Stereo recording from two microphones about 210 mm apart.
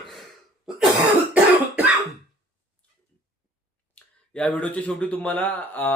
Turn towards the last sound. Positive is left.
turn(degrees=10)  # may be behind; listen again after turning